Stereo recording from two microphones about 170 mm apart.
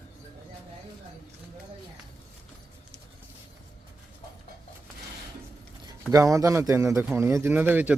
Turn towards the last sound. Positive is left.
turn(degrees=-10)  # may be behind; listen again after turning